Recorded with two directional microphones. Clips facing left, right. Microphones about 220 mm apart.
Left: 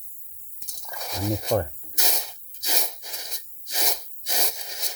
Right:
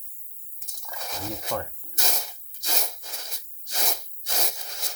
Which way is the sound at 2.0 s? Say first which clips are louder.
Left 1 dB; centre (ahead or behind).